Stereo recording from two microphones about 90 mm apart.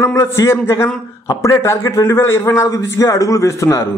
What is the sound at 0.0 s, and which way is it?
A man's voice, 30° left (ahead or behind).